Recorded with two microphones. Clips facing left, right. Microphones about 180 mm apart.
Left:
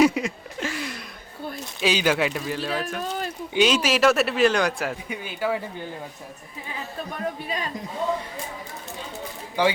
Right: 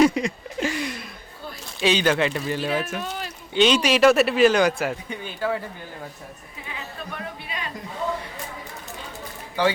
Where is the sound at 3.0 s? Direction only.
45° left (ahead or behind).